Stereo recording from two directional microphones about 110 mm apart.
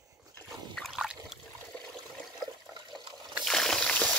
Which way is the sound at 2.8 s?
45° right (ahead or behind).